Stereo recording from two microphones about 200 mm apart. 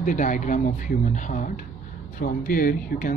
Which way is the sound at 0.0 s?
40° left (ahead or behind).